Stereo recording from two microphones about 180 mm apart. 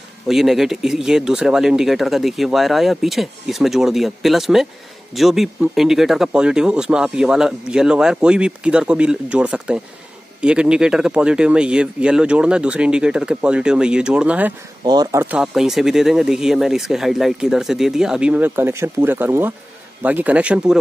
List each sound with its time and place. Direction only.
0.3 s speech: centre (ahead or behind)
14.9 s speech: 20° right (ahead or behind)
15.2 s speech: 5° right (ahead or behind)